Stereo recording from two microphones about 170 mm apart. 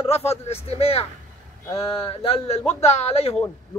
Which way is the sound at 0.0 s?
35° left (ahead or behind).